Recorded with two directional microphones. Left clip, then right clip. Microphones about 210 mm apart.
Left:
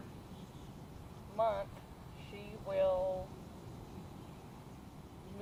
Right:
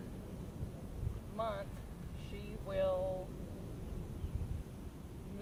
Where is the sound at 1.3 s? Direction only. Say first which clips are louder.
Left 6 dB; 35° right (ahead or behind).